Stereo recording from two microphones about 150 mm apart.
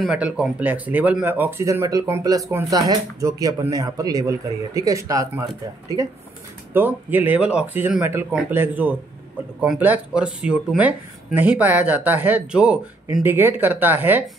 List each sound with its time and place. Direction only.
0.0 s speech: 5° right (ahead or behind); by 5.3 s 20° right (ahead or behind)
6.7 s speech: 15° right (ahead or behind)